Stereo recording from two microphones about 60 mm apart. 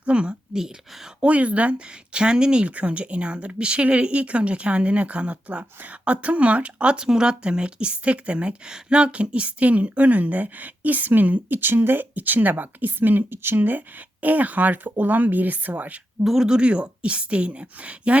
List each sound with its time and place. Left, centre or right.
0.0 s a woman's voice: centre
1.2 s speech: right
16.2 s speech: centre